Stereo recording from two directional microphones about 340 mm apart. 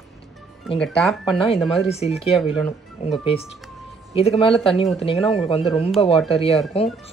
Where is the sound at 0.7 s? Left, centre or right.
Centre.